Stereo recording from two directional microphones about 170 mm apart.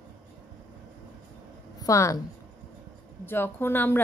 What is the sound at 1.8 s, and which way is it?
Speech, 20° left (ahead or behind).